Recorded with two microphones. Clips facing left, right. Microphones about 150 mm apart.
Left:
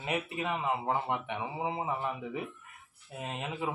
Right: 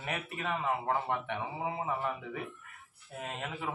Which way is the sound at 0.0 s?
15° left (ahead or behind).